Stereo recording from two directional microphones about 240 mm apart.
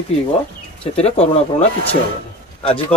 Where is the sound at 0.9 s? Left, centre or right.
Left.